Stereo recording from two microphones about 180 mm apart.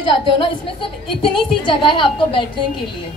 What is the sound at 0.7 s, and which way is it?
A woman's voice, 30° left (ahead or behind).